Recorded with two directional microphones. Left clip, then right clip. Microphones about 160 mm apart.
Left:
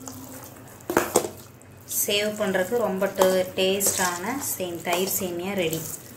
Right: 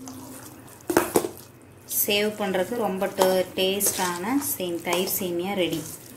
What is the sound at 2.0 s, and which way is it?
A woman's voice, 40° right (ahead or behind).